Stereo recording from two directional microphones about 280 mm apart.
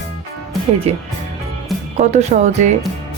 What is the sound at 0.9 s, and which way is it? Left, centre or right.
Speech, right.